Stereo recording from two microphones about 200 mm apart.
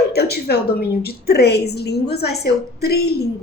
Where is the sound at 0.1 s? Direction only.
55° left (ahead or behind).